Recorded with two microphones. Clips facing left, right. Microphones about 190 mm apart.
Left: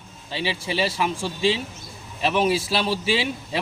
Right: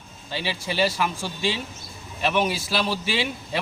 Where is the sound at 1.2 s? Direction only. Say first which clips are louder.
Left 4 dB; 30° left (ahead or behind).